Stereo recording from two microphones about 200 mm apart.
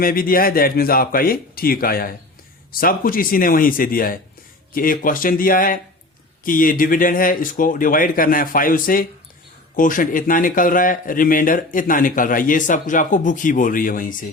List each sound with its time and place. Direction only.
0.0 s speech: 45° left (ahead or behind)